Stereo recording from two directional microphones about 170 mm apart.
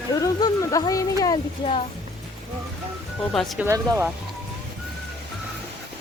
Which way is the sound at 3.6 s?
15° right (ahead or behind).